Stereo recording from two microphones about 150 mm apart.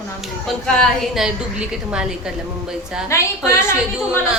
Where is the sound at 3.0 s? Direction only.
20° left (ahead or behind).